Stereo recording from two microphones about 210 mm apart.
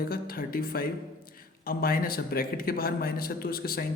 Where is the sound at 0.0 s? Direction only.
45° left (ahead or behind).